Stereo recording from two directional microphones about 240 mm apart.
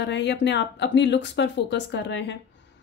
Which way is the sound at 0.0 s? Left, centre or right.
Left.